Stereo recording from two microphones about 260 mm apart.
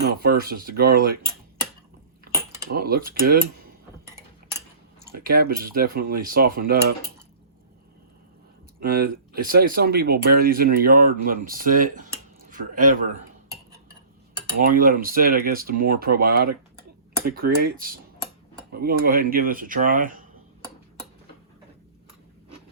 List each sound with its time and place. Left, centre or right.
0.0 s speech: right
2.6 s speech: right
5.1 s speech: right
8.8 s speech: right
14.6 s speech: right